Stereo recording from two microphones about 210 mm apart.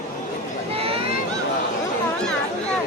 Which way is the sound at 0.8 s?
25° right (ahead or behind).